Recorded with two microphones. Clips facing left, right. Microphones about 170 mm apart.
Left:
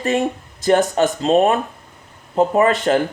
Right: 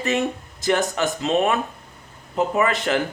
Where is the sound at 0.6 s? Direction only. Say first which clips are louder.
Left 6 dB; 35° left (ahead or behind).